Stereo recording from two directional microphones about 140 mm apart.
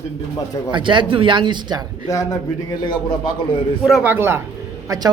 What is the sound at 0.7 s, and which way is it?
A woman's voice, 35° right (ahead or behind).